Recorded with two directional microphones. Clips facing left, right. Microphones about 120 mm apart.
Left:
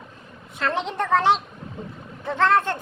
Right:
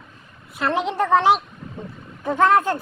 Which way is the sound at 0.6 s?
10° right (ahead or behind).